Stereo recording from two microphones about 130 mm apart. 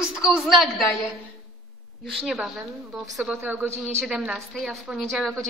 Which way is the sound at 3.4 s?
15° right (ahead or behind).